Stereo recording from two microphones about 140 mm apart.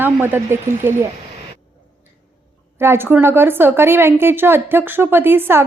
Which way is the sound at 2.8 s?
15° right (ahead or behind).